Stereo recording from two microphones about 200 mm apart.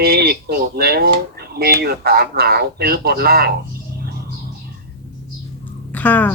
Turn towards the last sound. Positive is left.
turn(degrees=10)  # may be behind; listen again after turning